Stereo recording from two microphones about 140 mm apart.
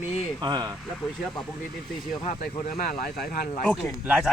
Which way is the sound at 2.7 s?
90° left.